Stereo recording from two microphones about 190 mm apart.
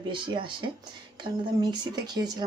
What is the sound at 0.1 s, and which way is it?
A woman's voice, 25° right (ahead or behind).